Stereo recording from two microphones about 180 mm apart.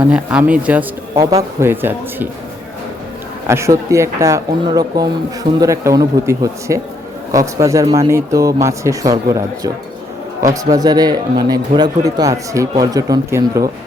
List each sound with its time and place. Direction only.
0.1 s speech: 5° right (ahead or behind)
3.4 s speech: 15° right (ahead or behind)
10.4 s speech: 20° right (ahead or behind)